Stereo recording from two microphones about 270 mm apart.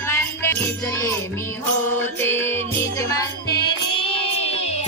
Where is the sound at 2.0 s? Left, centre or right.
Centre.